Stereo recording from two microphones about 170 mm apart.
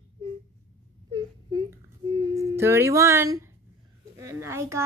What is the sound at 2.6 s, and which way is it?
A woman's voice, 15° right (ahead or behind).